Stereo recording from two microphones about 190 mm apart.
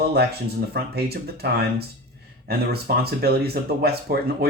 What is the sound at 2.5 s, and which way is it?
Speech, 55° right (ahead or behind).